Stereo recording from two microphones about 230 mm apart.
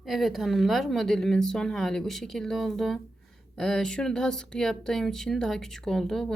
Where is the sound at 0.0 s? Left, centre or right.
Centre.